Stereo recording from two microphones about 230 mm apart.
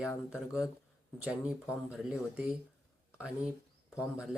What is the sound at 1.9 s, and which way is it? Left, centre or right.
Speech, centre.